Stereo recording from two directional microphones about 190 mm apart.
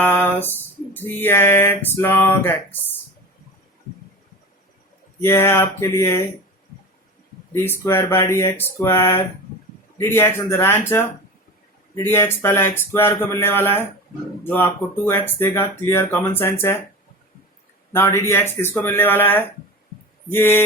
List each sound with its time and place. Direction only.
0.0 s a sound: 10° left (ahead or behind)
5.2 s speech: 15° left (ahead or behind)
7.5 s speech: 10° left (ahead or behind)
12.0 s speech: 10° left (ahead or behind)
17.9 s speech: 10° left (ahead or behind)